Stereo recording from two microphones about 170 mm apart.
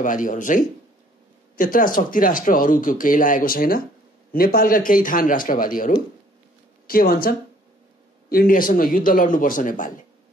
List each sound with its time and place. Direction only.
0.0 s speech: 50° left (ahead or behind)